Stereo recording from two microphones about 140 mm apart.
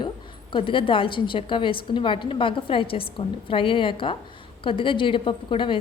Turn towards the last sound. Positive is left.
turn(degrees=35)  # may be behind; listen again after turning